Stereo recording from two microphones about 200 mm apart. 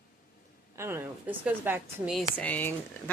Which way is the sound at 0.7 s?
10° right (ahead or behind).